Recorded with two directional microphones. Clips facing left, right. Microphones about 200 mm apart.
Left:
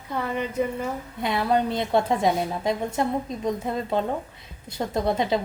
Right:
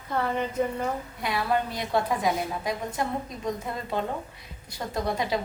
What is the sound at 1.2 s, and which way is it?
A woman's voice, 20° left (ahead or behind).